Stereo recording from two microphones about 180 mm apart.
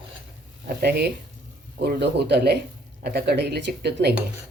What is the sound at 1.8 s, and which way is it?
Speech, 70° right (ahead or behind).